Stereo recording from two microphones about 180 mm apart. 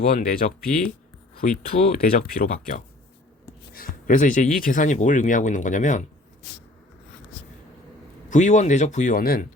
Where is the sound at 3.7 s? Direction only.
50° left (ahead or behind).